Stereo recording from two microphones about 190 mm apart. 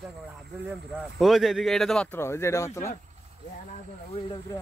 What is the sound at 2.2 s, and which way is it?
Speech, 15° left (ahead or behind).